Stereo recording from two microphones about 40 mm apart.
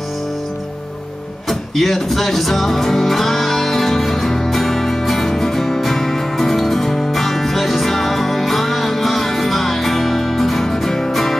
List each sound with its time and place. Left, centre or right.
1.5 s music: centre